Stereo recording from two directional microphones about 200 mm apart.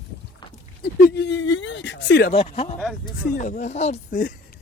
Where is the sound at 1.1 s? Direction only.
55° left (ahead or behind).